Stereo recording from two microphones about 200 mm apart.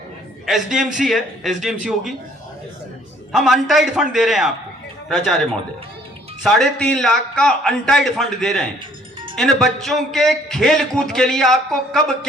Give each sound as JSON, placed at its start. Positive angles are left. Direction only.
{"t": 0.4, "sound": "a man's voice", "side_deg": 0}
{"t": 3.3, "sound": "a man's voice", "side_deg": 0}